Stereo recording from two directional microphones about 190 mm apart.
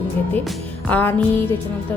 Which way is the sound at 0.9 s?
10° left (ahead or behind).